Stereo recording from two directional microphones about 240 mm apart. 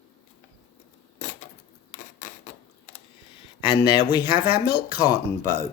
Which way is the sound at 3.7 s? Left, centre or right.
Centre.